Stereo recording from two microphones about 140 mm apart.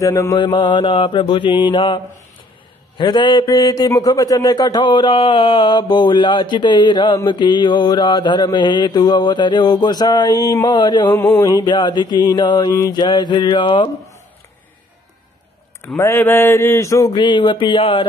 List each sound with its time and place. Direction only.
0.0 s speech: 25° left (ahead or behind)
0.4 s a man's voice: 35° left (ahead or behind)
3.0 s a man's voice: 35° left (ahead or behind)
11.1 s a man's voice: 20° left (ahead or behind)
16.0 s speech: 15° left (ahead or behind); by 18.0 s 40° left (ahead or behind)